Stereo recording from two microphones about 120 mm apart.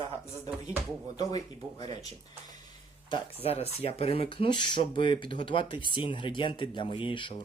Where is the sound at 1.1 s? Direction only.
35° left (ahead or behind).